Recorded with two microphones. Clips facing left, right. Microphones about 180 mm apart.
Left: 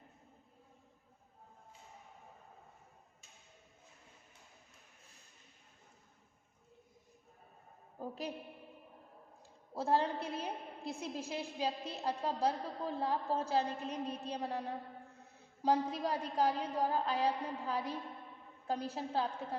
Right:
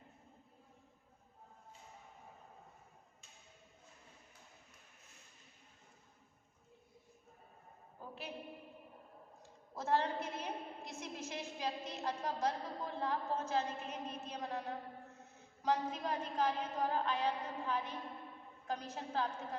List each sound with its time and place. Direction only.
7.9 s a woman's voice: 40° left (ahead or behind)
9.7 s a woman's voice: 30° left (ahead or behind)
15.6 s a woman's voice: 35° left (ahead or behind)